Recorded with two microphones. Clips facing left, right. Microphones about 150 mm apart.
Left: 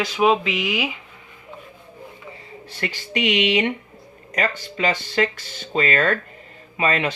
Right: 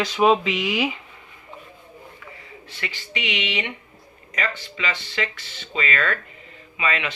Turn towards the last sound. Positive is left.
turn(degrees=40)  # may be behind; listen again after turning